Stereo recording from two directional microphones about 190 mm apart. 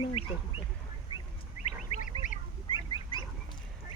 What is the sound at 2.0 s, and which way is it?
Bird, 45° left (ahead or behind).